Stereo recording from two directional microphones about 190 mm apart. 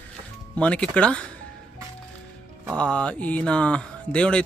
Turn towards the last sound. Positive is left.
turn(degrees=5)  # may be behind; listen again after turning